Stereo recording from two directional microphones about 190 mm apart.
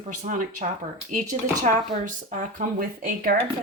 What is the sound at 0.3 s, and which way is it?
Speech, 40° right (ahead or behind).